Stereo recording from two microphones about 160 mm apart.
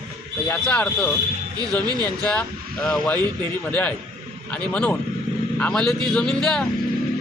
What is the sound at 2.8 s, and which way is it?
A man's voice, 5° left (ahead or behind).